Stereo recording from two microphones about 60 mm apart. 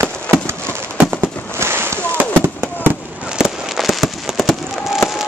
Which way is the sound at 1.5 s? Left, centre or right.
Right.